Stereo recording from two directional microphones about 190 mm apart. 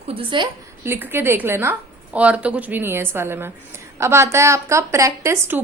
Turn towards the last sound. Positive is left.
turn(degrees=-15)  # may be behind; listen again after turning